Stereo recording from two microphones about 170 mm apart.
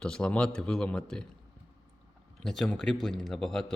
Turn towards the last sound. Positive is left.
turn(degrees=5)  # may be behind; listen again after turning